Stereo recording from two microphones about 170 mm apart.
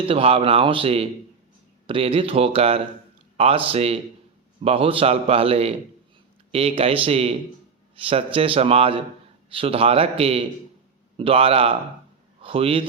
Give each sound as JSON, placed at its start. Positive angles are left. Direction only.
{"t": 0.0, "sound": "a man's voice", "side_deg": -35}